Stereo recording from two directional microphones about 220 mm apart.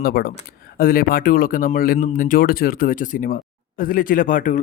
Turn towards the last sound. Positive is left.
turn(degrees=35)  # may be behind; listen again after turning